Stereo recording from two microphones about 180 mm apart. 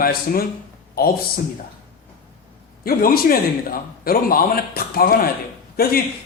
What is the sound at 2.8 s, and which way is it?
A man's voice, 55° left (ahead or behind).